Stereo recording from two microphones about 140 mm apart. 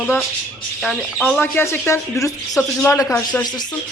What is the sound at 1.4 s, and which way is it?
Speech, 15° left (ahead or behind).